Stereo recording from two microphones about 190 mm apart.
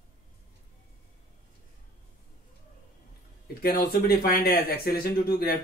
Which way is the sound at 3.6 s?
55° left (ahead or behind).